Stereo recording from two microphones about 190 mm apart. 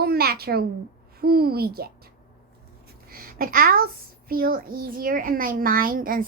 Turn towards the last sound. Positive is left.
turn(degrees=-45)  # may be behind; listen again after turning